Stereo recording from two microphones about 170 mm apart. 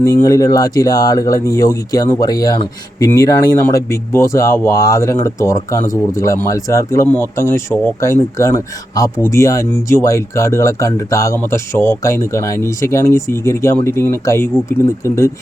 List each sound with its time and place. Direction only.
0.0 s speech: 20° left (ahead or behind)